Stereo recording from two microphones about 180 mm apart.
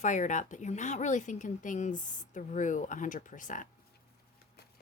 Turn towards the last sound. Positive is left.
turn(degrees=45)  # may be behind; listen again after turning